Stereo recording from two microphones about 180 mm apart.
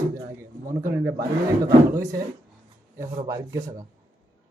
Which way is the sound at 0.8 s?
15° right (ahead or behind).